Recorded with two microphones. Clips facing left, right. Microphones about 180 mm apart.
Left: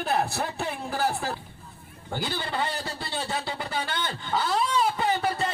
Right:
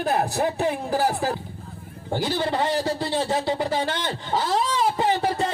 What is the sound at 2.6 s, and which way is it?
Speech, 90° right.